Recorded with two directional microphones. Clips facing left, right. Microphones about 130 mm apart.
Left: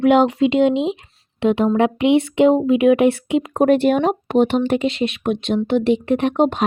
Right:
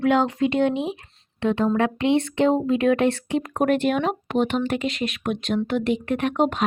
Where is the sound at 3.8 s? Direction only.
40° left (ahead or behind).